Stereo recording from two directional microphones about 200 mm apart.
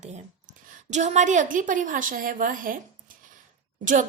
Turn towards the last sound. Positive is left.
turn(degrees=-40)  # may be behind; listen again after turning